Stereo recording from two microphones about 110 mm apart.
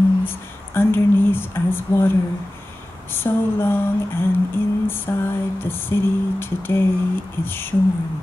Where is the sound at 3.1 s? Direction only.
20° left (ahead or behind).